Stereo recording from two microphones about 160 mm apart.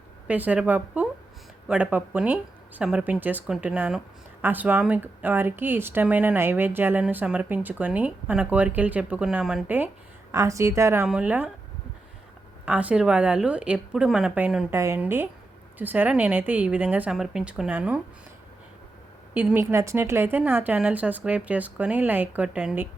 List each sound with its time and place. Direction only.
0.3 s a woman's voice: 10° right (ahead or behind)
11.0 s speech: 5° right (ahead or behind)
12.6 s speech: 10° right (ahead or behind)
19.3 s speech: 10° right (ahead or behind)